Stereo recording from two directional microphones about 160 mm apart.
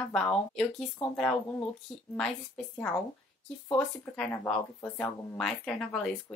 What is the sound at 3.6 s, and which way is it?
Speech, 5° left (ahead or behind).